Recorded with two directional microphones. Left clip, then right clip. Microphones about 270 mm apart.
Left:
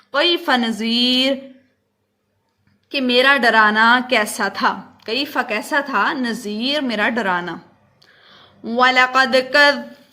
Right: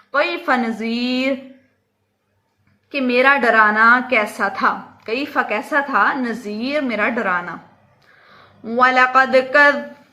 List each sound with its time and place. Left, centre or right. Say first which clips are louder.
0.1 s a woman's voice: left 1 dB; left
3.0 s a woman's voice: even; left